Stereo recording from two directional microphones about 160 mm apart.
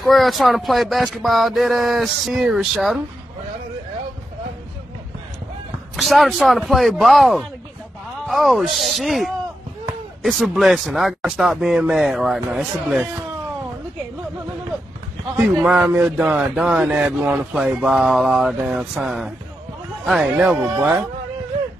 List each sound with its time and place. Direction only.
0.0 s speech: centre (ahead or behind)
5.9 s speech: centre (ahead or behind)
15.6 s speech: 5° right (ahead or behind)